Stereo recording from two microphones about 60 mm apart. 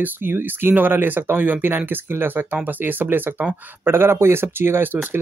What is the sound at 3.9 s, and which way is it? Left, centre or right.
Speech, right.